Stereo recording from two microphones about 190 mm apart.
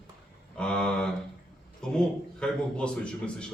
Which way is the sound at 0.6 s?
5° left (ahead or behind).